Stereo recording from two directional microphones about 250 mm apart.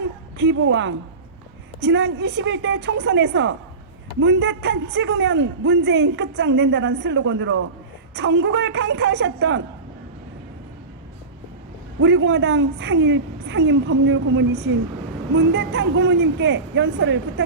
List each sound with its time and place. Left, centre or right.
0.3 s a man's voice: right
11.9 s a man's voice: right